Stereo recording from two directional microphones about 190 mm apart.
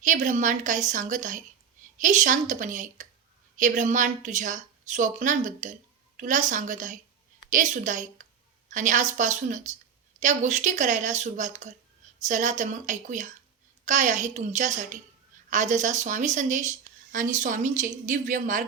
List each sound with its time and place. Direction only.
0.0 s speech: 40° right (ahead or behind)